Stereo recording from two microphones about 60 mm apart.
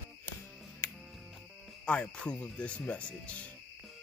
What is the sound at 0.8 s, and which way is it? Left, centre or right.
Music, left.